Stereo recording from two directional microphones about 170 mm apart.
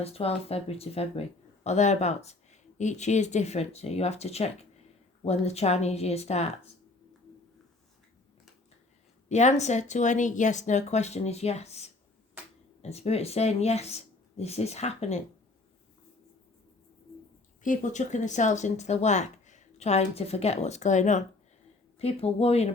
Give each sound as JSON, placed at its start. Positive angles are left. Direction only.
{"t": 0.0, "sound": "speech", "side_deg": 35}
{"t": 9.3, "sound": "speech", "side_deg": 40}
{"t": 17.6, "sound": "speech", "side_deg": 50}